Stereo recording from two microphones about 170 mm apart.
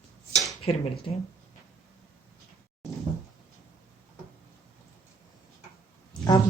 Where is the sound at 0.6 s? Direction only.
35° left (ahead or behind).